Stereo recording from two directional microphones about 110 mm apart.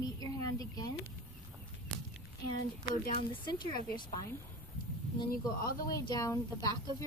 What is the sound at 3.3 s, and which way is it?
Speech, 45° left (ahead or behind).